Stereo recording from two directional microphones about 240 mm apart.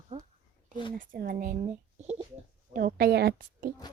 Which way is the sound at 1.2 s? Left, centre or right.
Right.